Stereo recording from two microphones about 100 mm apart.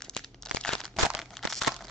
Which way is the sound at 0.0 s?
5° left (ahead or behind).